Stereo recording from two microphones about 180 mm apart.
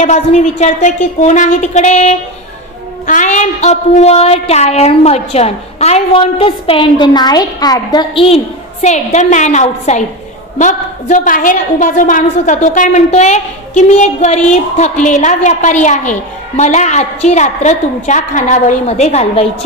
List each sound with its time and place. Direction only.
0.0 s a woman's voice: 40° left (ahead or behind)